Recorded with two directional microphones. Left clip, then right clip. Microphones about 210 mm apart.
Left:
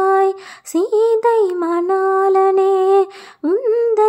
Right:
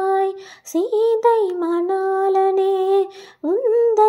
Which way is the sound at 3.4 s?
20° left (ahead or behind).